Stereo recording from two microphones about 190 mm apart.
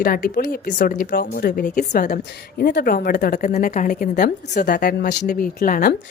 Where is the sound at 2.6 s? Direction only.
50° left (ahead or behind).